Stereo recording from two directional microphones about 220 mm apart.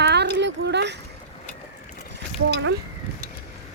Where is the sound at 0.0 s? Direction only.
50° right (ahead or behind).